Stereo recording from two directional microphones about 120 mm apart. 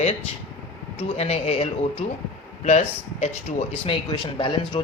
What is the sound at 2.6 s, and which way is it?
Speech, 70° left (ahead or behind).